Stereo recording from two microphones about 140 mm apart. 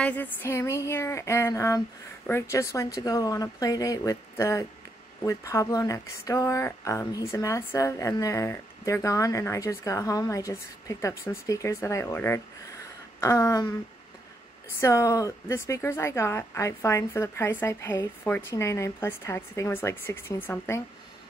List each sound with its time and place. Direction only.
0.0 s speech: 10° left (ahead or behind)
14.8 s speech: 20° left (ahead or behind)